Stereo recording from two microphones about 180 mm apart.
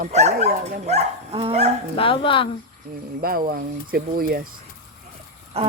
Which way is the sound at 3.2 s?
55° right (ahead or behind).